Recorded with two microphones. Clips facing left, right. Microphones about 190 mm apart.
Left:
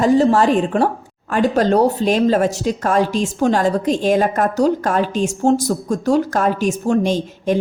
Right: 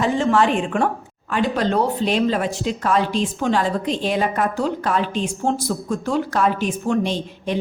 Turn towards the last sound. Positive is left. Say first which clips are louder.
# left 6 dB
turn(degrees=45)  # may be behind; listen again after turning